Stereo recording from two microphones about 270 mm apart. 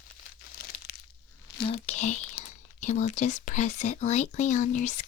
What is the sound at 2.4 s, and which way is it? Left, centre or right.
Speech, left.